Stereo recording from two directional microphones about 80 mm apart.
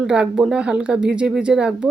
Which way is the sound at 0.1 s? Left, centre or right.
Centre.